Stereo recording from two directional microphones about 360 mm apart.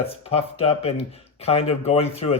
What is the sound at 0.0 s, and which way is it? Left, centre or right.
Speech, centre.